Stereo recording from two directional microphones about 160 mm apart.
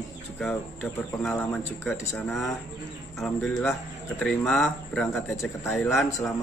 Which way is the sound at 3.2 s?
5° left (ahead or behind).